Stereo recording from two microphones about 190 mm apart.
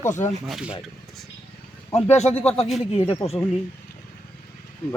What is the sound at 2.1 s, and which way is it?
Speech, 35° left (ahead or behind).